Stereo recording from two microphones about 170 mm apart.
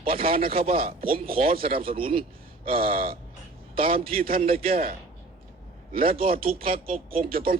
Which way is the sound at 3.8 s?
35° right (ahead or behind).